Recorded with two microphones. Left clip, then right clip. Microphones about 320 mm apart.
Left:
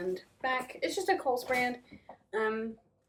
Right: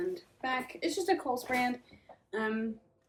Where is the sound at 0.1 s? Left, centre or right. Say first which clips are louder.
Left 2 dB; centre.